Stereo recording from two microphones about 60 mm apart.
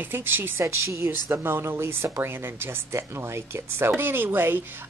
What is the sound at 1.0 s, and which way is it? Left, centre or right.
Speech, right.